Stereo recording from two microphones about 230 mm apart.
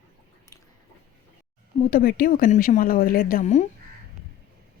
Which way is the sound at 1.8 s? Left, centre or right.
Left.